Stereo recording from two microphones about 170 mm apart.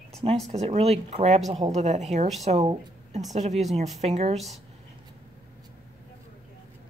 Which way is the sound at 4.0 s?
40° right (ahead or behind).